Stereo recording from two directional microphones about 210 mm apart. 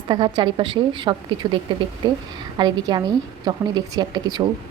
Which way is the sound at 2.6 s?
20° right (ahead or behind).